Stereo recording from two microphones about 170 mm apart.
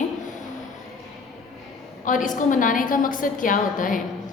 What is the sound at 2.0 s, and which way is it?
A woman's voice, 50° left (ahead or behind).